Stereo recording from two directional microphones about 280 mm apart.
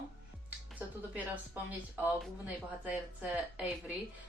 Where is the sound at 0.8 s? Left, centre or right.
Centre.